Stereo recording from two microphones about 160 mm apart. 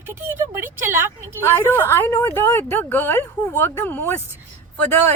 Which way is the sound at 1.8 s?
15° left (ahead or behind).